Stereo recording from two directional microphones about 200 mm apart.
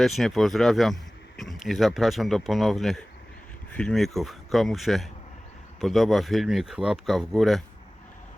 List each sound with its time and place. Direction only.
0.0 s speech: centre (ahead or behind)